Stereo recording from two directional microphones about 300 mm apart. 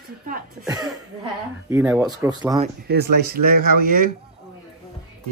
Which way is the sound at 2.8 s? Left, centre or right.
Right.